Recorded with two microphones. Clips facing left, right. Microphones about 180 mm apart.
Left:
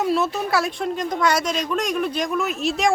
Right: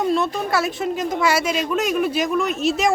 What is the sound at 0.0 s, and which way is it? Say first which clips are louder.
Speech: right 1 dB; 5° left (ahead or behind).